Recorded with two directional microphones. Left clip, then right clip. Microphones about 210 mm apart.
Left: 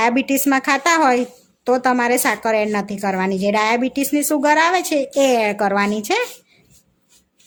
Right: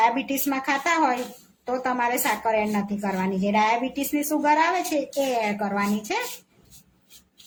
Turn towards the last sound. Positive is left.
turn(degrees=55)  # may be behind; listen again after turning